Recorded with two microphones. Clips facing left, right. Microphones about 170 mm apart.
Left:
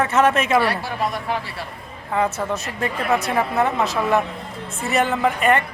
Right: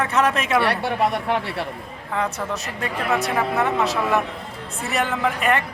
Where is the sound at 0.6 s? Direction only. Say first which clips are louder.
Right 2 dB; 65° right (ahead or behind).